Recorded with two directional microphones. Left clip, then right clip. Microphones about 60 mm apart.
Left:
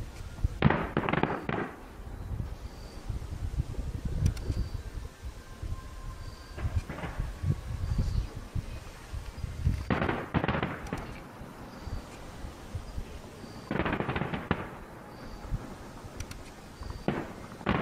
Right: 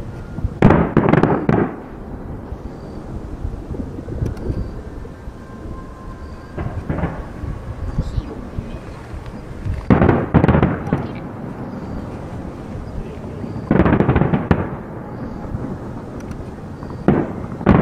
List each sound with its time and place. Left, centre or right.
0.6 s fireworks: left
6.5 s a sound: left
9.8 s fireworks: left
13.7 s music: left
17.0 s fireworks: left